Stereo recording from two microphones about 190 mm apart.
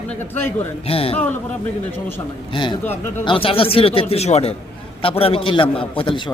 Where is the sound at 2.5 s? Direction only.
25° left (ahead or behind).